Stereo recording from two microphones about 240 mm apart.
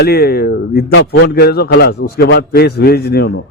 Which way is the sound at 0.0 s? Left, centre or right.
Left.